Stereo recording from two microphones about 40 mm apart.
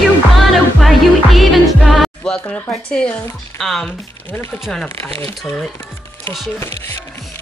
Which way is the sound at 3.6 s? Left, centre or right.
Centre.